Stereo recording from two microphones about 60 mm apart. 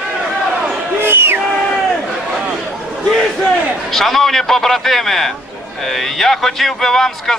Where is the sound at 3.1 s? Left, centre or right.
Centre.